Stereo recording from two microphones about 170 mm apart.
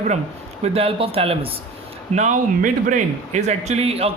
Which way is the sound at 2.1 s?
50° right (ahead or behind).